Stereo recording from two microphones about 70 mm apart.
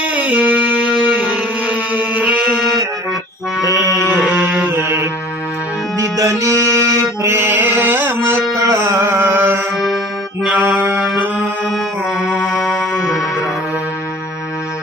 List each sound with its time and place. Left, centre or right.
0.1 s music: right
4.1 s music: centre
4.7 s music: right
6.0 s music: right
8.6 s music: right
9.7 s accordion: centre
11.7 s music: centre